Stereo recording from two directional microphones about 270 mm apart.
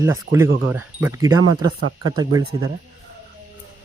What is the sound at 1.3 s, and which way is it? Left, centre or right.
Speech, right.